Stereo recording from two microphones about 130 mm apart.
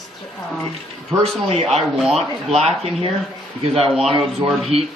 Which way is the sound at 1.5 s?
50° right (ahead or behind).